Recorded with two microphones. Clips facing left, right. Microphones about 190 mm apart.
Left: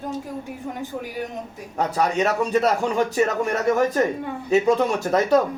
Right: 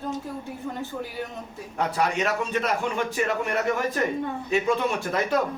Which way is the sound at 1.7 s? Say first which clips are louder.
Left 3 dB; 40° left (ahead or behind).